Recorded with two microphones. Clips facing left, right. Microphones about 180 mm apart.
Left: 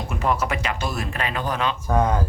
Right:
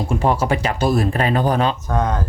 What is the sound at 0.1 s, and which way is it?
Speech, 30° right (ahead or behind).